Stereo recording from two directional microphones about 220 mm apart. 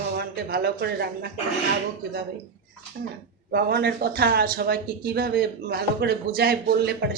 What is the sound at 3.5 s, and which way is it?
Speech, 45° right (ahead or behind).